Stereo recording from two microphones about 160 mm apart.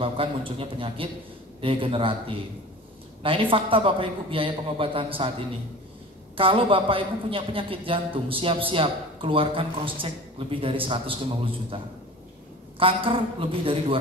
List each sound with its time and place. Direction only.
0.0 s a man's voice: 35° right (ahead or behind)
6.3 s a man's voice: 35° right (ahead or behind)